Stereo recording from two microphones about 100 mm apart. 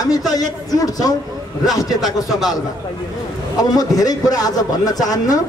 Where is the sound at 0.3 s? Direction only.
40° left (ahead or behind).